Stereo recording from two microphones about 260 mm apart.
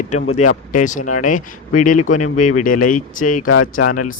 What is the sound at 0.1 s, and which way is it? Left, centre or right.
Speech, left.